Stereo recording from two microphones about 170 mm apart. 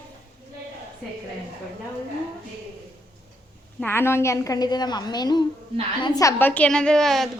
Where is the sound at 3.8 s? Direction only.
15° left (ahead or behind).